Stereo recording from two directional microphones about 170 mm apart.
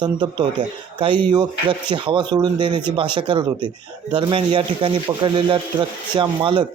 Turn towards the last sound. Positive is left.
turn(degrees=-25)  # may be behind; listen again after turning